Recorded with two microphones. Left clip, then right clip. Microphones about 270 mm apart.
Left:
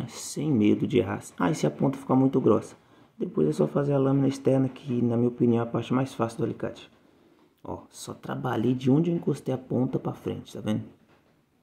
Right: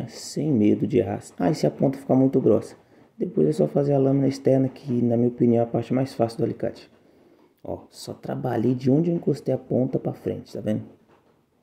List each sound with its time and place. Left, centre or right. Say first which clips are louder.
0.0 s speech: right 4 dB; centre